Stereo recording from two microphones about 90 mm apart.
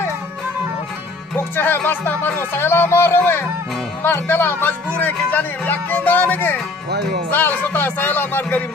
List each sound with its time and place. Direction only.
1.3 s speech: 25° left (ahead or behind)